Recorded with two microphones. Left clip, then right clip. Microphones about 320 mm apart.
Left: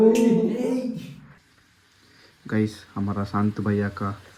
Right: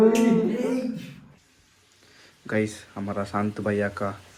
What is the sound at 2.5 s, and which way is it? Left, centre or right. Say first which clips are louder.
Speech: right 1 dB; centre.